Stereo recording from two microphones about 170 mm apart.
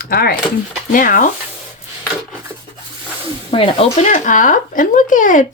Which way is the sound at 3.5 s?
35° left (ahead or behind).